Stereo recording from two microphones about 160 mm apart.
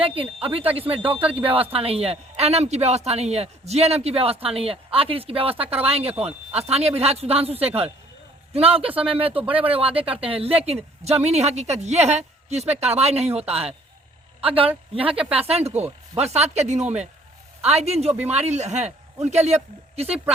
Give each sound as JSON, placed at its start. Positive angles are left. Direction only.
{"t": 0.0, "sound": "a woman's voice", "side_deg": -35}
{"t": 14.9, "sound": "a woman's voice", "side_deg": -35}